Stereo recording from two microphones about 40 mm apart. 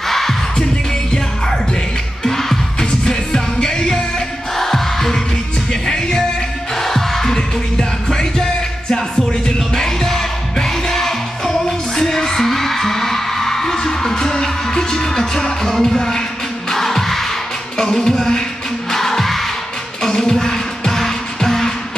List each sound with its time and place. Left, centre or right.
0.1 s music: centre
2.2 s music: centre